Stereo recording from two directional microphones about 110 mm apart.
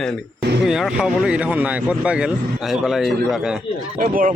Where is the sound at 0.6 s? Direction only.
5° right (ahead or behind).